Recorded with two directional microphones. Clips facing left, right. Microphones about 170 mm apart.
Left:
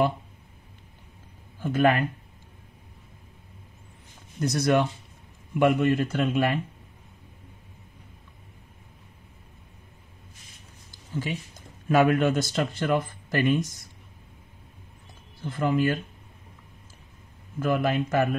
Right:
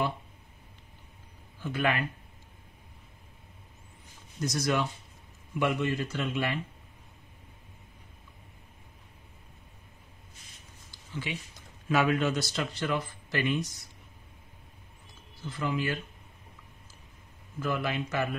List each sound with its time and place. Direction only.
1.6 s a man's voice: 45° left (ahead or behind)
4.4 s a man's voice: 60° left (ahead or behind)
10.9 s speech: 45° left (ahead or behind)
15.4 s a man's voice: 50° left (ahead or behind)
17.6 s a man's voice: 50° left (ahead or behind)